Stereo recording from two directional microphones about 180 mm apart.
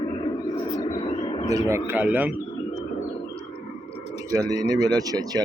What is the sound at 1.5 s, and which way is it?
Speech, 15° right (ahead or behind).